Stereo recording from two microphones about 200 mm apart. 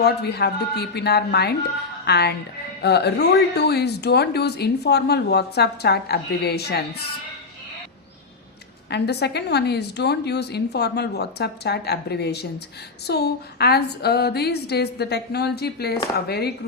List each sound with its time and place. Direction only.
0.0 s a woman's voice: 55° left (ahead or behind)
8.9 s a woman's voice: 55° left (ahead or behind)